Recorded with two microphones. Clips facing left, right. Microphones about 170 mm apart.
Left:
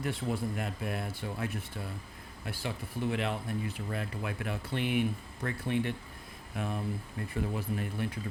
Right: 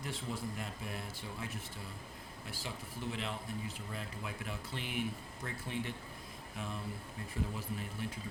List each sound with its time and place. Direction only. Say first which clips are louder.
0.0 s speech: left 7 dB; 60° left (ahead or behind)